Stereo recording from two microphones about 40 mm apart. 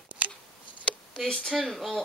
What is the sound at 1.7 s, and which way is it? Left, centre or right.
Speech, centre.